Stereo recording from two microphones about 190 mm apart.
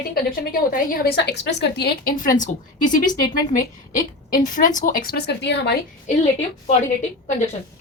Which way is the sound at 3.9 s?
45° left (ahead or behind).